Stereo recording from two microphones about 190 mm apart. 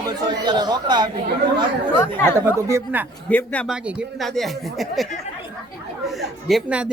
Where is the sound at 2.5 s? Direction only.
15° right (ahead or behind).